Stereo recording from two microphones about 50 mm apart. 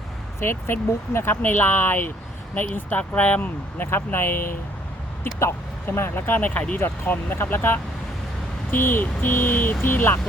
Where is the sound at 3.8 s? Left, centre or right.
Left.